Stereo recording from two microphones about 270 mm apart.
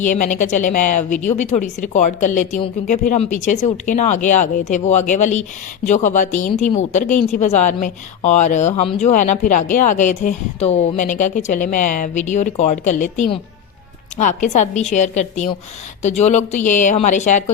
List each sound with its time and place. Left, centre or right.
0.0 s speech: left